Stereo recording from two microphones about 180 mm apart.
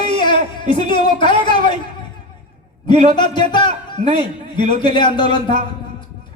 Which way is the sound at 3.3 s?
25° left (ahead or behind).